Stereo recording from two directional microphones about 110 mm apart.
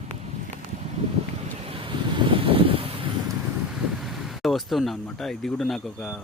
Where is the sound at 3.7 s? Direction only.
Centre (ahead or behind).